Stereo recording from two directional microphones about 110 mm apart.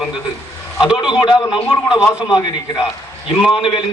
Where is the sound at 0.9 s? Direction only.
40° left (ahead or behind).